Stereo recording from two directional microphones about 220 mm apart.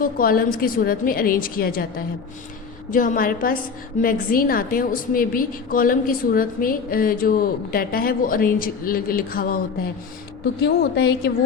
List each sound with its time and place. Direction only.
0.0 s a woman's voice: 40° left (ahead or behind)
10.6 s a woman's voice: 50° left (ahead or behind)